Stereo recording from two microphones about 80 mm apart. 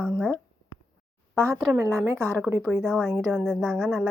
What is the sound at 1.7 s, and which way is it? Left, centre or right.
Speech, right.